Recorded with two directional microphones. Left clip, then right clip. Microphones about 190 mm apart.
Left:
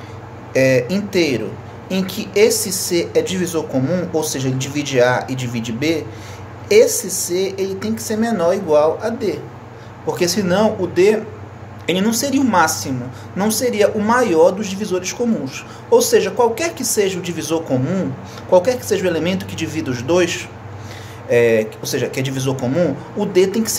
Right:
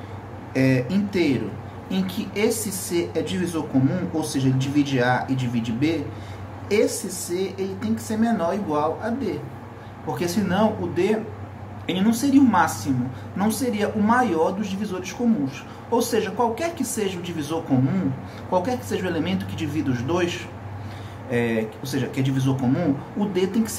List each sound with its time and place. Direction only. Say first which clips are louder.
0.5 s speech: left 8 dB; 50° left (ahead or behind)